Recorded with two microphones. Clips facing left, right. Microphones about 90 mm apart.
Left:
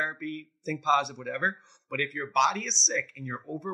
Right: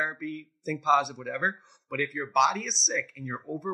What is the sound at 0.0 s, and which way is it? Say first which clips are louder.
Speech: right 1 dB; 5° right (ahead or behind).